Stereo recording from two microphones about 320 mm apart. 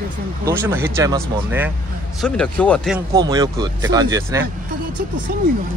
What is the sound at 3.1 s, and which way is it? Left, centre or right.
Speech, centre.